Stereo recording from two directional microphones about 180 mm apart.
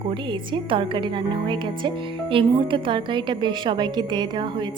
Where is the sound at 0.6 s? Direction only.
30° right (ahead or behind).